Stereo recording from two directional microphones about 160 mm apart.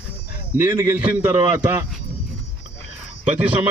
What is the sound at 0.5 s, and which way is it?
Speech, 10° right (ahead or behind).